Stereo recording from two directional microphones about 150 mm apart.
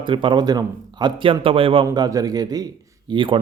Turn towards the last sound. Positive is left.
turn(degrees=-35)  # may be behind; listen again after turning